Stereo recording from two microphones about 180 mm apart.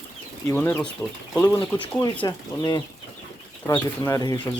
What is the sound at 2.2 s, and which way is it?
Speech, 20° left (ahead or behind).